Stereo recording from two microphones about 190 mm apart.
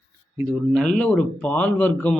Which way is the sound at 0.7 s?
5° left (ahead or behind).